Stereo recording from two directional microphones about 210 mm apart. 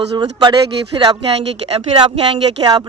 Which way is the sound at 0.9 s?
20° right (ahead or behind).